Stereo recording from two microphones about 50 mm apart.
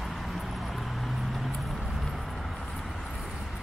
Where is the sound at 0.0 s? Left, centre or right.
Centre.